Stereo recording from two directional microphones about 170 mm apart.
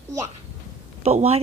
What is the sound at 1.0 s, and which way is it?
Speech, 40° right (ahead or behind).